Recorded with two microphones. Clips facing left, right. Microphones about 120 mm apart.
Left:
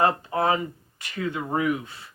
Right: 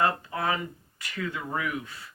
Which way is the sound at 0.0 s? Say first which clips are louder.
Left 5 dB; 25° left (ahead or behind).